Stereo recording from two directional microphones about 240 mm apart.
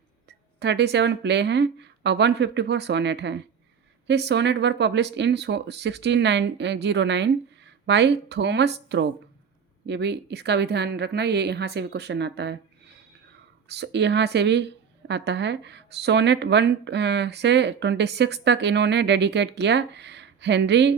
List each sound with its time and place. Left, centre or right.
0.3 s a woman's voice: right
13.7 s a woman's voice: right